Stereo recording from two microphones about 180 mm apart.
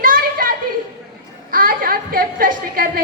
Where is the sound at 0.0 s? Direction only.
50° right (ahead or behind).